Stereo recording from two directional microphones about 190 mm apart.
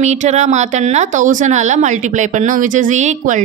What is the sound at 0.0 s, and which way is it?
A woman's voice, 35° right (ahead or behind).